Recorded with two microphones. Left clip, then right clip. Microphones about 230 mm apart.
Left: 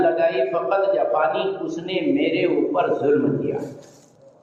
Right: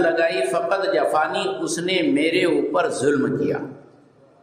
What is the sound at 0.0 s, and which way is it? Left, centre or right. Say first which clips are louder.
A man's voice: left 1 dB; right.